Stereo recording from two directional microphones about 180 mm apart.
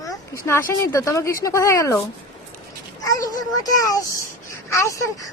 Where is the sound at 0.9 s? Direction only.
15° left (ahead or behind).